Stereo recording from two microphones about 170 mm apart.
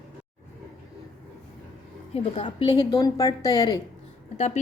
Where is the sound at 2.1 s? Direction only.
35° left (ahead or behind).